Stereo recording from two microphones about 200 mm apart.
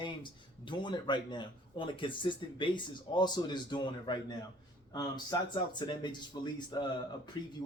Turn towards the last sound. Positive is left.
turn(degrees=25)  # may be behind; listen again after turning